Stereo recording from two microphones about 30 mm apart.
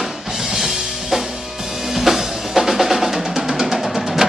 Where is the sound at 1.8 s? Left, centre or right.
Centre.